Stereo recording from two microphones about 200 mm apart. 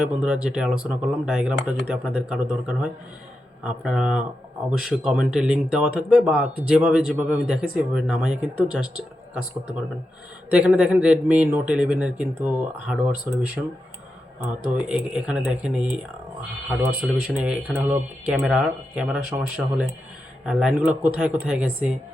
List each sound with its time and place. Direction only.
0.0 s speech: 5° right (ahead or behind)
10.5 s speech: 5° right (ahead or behind)
14.8 s speech: 5° right (ahead or behind)